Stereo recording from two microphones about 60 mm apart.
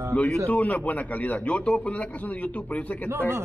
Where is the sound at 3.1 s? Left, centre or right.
Right.